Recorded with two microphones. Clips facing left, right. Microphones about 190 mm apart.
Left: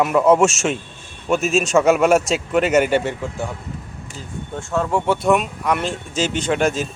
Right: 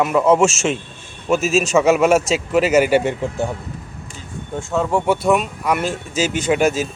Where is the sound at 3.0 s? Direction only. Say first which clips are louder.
Right 4 dB; 20° right (ahead or behind).